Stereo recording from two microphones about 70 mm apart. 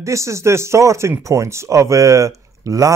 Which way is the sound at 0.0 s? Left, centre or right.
Right.